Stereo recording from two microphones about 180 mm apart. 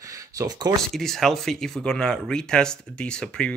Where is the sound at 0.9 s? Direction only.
Centre (ahead or behind).